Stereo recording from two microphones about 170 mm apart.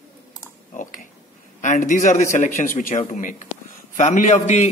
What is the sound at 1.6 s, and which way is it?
Speech, 50° left (ahead or behind).